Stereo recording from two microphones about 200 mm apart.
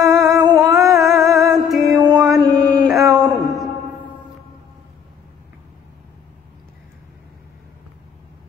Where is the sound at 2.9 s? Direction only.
Centre (ahead or behind).